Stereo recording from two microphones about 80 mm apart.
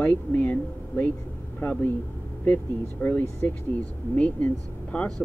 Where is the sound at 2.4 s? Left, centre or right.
Centre.